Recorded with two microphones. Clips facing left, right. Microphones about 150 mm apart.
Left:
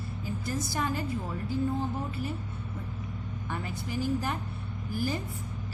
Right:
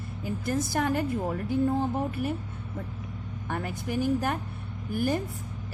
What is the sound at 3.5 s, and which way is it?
A woman's voice, 55° right (ahead or behind).